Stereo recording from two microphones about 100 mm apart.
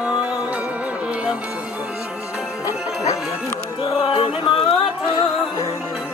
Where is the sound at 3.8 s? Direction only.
65° left (ahead or behind).